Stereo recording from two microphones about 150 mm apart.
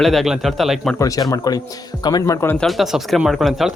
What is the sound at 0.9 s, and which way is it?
Speech, 25° left (ahead or behind).